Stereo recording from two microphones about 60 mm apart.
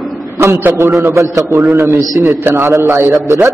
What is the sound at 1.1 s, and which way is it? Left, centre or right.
Speech, right.